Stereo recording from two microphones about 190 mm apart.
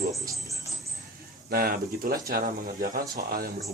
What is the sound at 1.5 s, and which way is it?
Speech, 50° right (ahead or behind).